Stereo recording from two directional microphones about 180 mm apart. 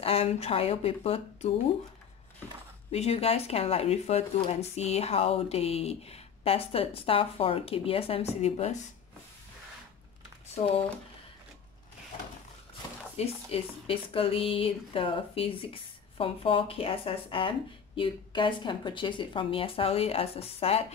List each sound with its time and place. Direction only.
0.0 s speech: 35° left (ahead or behind)
2.9 s speech: 35° left (ahead or behind)
13.1 s speech: 35° left (ahead or behind)